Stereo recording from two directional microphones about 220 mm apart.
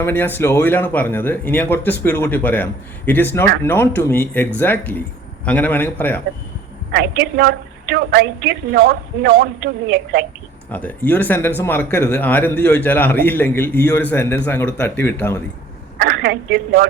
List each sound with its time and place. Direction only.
0.0 s speech: 10° left (ahead or behind)
6.9 s a woman's voice: 45° right (ahead or behind)
10.7 s speech: 10° left (ahead or behind)
16.0 s a woman's voice: 45° right (ahead or behind)